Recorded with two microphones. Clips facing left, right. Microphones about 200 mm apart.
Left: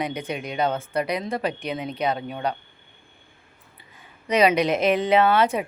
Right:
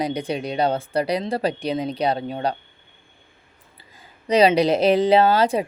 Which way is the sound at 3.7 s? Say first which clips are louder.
Right 1 dB; 30° right (ahead or behind).